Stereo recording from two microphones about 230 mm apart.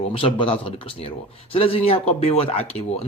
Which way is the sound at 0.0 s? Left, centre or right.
Left.